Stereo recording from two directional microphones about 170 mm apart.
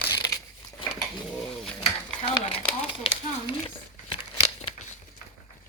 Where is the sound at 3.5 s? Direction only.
30° left (ahead or behind).